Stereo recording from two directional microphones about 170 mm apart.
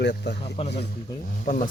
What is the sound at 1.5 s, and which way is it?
Speech, 55° left (ahead or behind).